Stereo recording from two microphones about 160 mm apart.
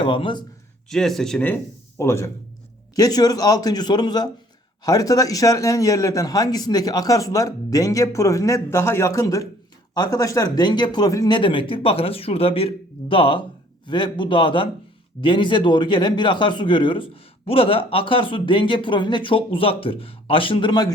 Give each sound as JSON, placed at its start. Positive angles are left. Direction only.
{"t": 0.0, "sound": "speech", "side_deg": 30}
{"t": 0.9, "sound": "a man's voice", "side_deg": 0}